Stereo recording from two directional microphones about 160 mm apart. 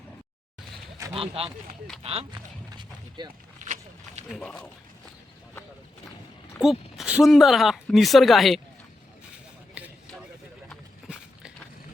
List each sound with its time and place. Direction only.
1.1 s speech: 35° right (ahead or behind)
2.3 s run: 25° right (ahead or behind)
3.6 s a sound: 45° right (ahead or behind)
4.3 s speech: centre (ahead or behind)
6.6 s speech: centre (ahead or behind)
9.8 s a sound: 5° right (ahead or behind)